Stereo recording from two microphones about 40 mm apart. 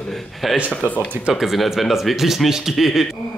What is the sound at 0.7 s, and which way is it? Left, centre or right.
Speech, left.